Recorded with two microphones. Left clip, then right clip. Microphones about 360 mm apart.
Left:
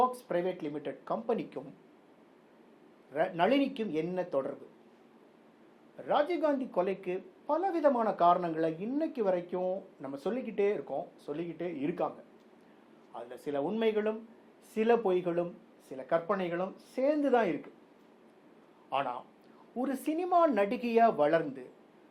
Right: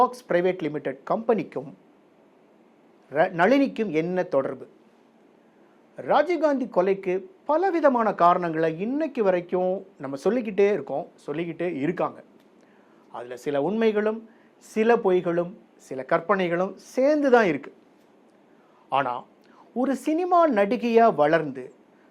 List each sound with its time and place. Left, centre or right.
0.0 s a woman's voice: right
3.1 s speech: right
6.0 s a woman's voice: right
13.1 s a woman's voice: right
15.9 s speech: right
18.9 s a man's voice: right
19.8 s speech: right